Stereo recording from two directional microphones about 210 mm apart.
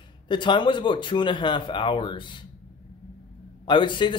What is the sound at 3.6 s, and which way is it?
Speech, 20° left (ahead or behind).